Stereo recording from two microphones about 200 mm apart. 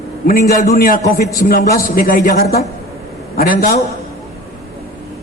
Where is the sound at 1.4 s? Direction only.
45° left (ahead or behind).